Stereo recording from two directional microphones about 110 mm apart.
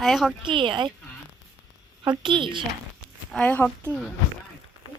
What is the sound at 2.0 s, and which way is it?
Speech, 45° right (ahead or behind).